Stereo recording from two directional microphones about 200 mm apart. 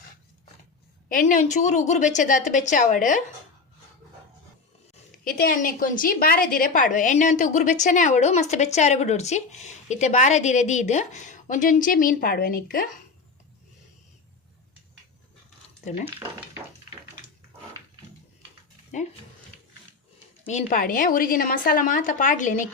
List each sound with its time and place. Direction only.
1.0 s a woman's voice: 40° left (ahead or behind)
5.4 s a woman's voice: 45° left (ahead or behind)
18.9 s a woman's voice: 35° left (ahead or behind)
20.5 s a woman's voice: 40° left (ahead or behind)